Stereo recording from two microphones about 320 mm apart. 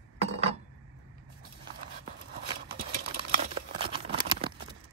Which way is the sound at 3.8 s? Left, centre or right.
Centre.